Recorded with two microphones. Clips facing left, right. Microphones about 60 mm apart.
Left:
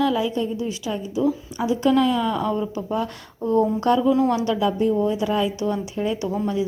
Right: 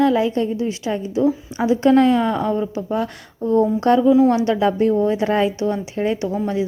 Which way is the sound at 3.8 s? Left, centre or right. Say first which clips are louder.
Right 5 dB; right.